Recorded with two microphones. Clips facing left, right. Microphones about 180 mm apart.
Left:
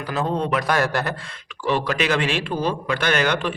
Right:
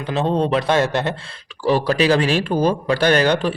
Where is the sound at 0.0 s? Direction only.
25° right (ahead or behind).